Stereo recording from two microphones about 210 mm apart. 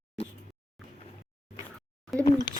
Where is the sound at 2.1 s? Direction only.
Centre (ahead or behind).